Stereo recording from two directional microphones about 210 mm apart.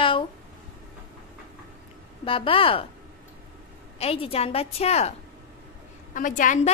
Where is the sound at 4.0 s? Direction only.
30° left (ahead or behind).